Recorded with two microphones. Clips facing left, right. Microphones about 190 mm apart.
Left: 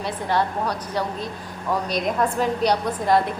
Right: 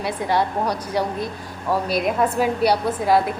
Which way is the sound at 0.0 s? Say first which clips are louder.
Right 2 dB; 10° right (ahead or behind).